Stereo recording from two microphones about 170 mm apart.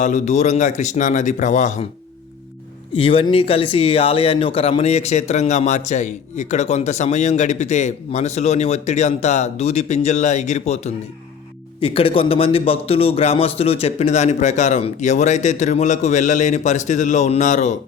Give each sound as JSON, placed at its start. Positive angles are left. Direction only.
{"t": 0.0, "sound": "a man's voice", "side_deg": 45}
{"t": 2.9, "sound": "a man's voice", "side_deg": 35}